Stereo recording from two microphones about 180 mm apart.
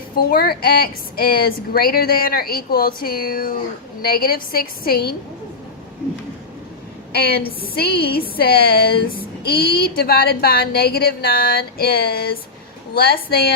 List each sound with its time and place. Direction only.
0.2 s speech: 55° left (ahead or behind)
7.1 s speech: 60° left (ahead or behind)